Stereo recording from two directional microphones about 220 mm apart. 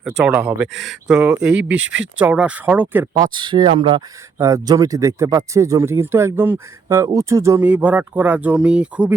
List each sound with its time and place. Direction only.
0.3 s speech: 5° right (ahead or behind)
1.8 s speech: 60° right (ahead or behind)
2.1 s speech: 5° right (ahead or behind)
3.3 s speech: 20° right (ahead or behind)